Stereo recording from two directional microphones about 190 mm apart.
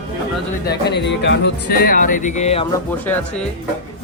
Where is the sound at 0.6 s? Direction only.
60° left (ahead or behind); by 2.7 s 35° left (ahead or behind).